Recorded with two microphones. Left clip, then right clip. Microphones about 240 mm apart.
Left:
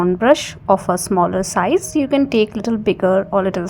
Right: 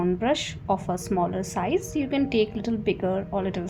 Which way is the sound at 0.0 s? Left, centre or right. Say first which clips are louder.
Left 11 dB; left.